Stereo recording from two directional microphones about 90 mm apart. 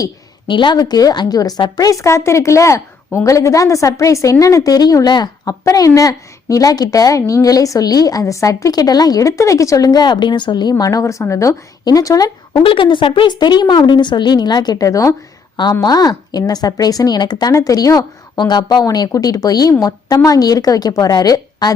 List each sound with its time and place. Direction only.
0.4 s a woman's voice: 65° left (ahead or behind)
5.6 s a woman's voice: 40° left (ahead or behind)
12.6 s a woman's voice: 70° left (ahead or behind); by 17.5 s 50° left (ahead or behind)
17.5 s a woman's voice: 40° left (ahead or behind)
18.3 s a woman's voice: 55° left (ahead or behind)